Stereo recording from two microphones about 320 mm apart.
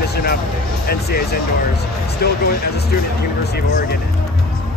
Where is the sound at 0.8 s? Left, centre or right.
Left.